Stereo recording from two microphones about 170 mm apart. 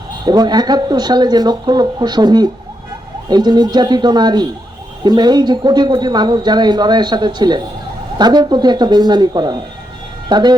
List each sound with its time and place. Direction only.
0.3 s speech: 25° right (ahead or behind)